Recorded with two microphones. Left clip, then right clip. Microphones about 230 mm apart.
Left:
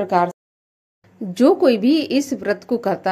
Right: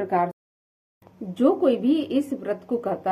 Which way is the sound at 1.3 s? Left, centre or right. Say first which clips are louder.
Left 6 dB; left.